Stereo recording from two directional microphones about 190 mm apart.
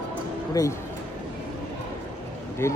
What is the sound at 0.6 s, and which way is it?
Speech, 20° left (ahead or behind).